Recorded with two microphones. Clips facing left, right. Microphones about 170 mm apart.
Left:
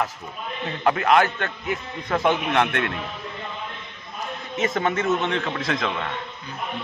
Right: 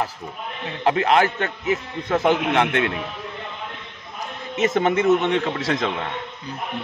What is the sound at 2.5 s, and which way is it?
Speech, 15° right (ahead or behind).